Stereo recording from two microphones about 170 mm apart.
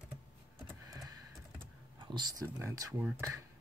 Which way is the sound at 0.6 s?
20° right (ahead or behind).